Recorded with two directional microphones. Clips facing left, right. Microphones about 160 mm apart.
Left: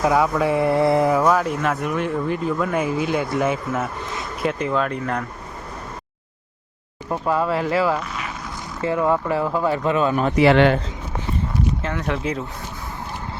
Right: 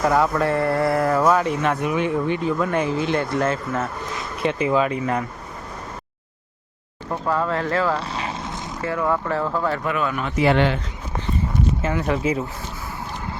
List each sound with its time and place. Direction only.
0.0 s mantra: 5° left (ahead or behind)
1.2 s speech: centre (ahead or behind)
4.4 s speech: 5° right (ahead or behind)
7.1 s mantra: 10° left (ahead or behind)
7.9 s vehicle: 30° right (ahead or behind)
8.8 s mantra: 20° left (ahead or behind)
9.8 s speech: 25° left (ahead or behind)
10.3 s speech: 80° left
11.8 s speech: 5° right (ahead or behind)